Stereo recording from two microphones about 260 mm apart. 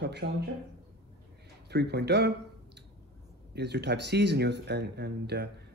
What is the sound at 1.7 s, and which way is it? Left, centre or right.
Speech, right.